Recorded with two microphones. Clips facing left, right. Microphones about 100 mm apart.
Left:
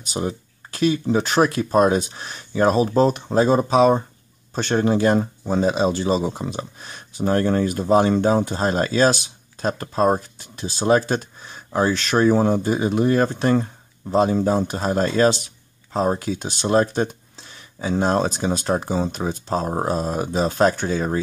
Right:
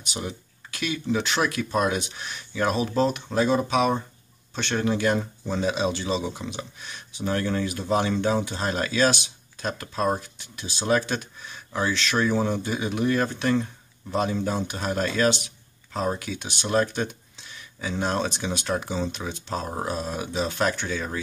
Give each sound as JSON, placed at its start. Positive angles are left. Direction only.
{"t": 0.0, "sound": "speech", "side_deg": 40}